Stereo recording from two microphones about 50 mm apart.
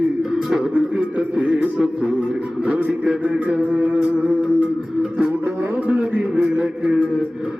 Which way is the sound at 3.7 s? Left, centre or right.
Right.